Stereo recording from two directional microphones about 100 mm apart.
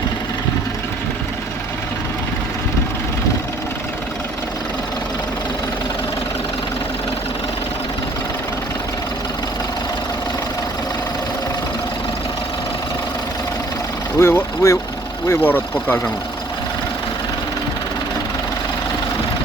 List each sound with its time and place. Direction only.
14.2 s vehicle: 25° left (ahead or behind)
15.3 s speech: 20° left (ahead or behind)